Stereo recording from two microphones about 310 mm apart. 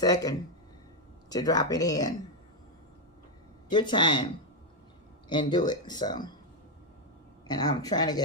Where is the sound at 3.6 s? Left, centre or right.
Centre.